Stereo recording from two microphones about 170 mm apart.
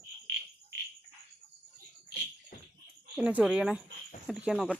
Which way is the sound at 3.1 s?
5° right (ahead or behind).